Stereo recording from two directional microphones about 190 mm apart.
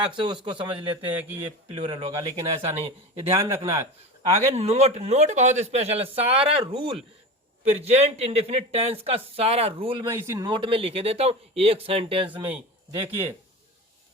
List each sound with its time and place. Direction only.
0.0 s speech: 25° right (ahead or behind)
1.0 s speech: 10° right (ahead or behind)
1.5 s speech: 30° right (ahead or behind)
4.4 s a man's voice: 35° right (ahead or behind)
10.1 s speech: 15° right (ahead or behind)
12.3 s speech: 10° right (ahead or behind)
12.9 s speech: 30° right (ahead or behind)